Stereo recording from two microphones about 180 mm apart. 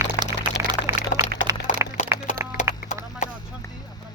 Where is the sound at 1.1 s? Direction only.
45° left (ahead or behind).